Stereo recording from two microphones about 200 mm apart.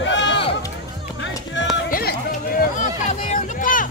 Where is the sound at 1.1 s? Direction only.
65° left (ahead or behind).